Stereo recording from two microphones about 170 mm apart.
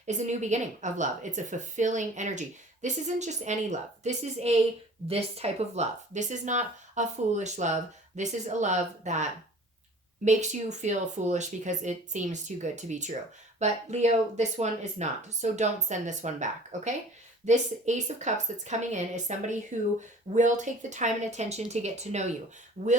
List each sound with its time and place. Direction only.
0.0 s a woman's voice: 45° right (ahead or behind)